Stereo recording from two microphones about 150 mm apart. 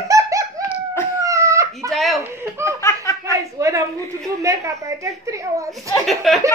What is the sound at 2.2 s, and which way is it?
Speech, 20° right (ahead or behind).